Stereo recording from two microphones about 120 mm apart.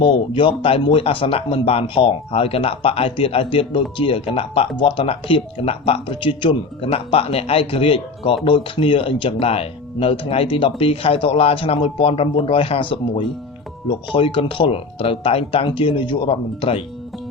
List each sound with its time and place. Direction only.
0.0 s speech: 40° left (ahead or behind)